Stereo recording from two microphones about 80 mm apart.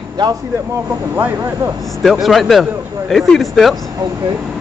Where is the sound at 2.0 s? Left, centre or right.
Centre.